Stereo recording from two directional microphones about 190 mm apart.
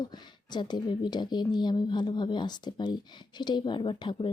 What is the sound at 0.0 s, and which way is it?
A woman's voice, 20° left (ahead or behind).